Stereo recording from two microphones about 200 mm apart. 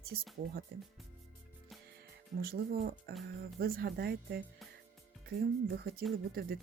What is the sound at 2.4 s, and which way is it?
Speech, 50° right (ahead or behind).